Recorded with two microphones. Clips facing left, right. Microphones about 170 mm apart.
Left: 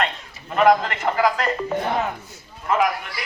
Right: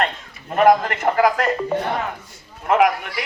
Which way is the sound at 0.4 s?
45° right (ahead or behind).